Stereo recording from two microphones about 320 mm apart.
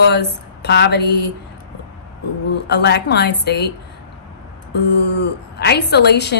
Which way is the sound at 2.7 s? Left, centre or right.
Left.